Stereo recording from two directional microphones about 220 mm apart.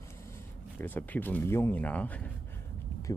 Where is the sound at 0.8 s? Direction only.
10° left (ahead or behind).